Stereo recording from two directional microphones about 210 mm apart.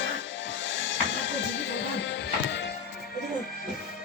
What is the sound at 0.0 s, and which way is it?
Music, 60° left (ahead or behind).